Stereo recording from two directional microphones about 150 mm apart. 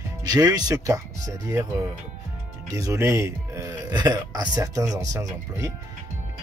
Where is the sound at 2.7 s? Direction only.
20° right (ahead or behind).